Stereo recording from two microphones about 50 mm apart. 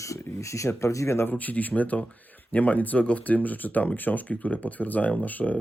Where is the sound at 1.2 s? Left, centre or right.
Left.